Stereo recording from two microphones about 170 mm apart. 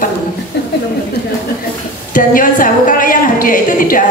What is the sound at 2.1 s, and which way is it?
A woman's voice, 55° left (ahead or behind).